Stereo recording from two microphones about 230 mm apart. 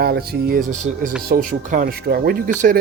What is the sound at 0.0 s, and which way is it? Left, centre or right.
Speech, right.